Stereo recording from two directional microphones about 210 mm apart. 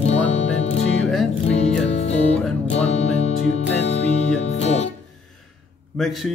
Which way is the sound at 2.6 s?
30° left (ahead or behind).